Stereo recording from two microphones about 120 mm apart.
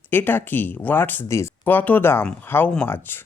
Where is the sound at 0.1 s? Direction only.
15° left (ahead or behind).